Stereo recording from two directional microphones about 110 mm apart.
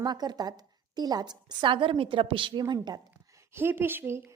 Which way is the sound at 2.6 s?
40° right (ahead or behind).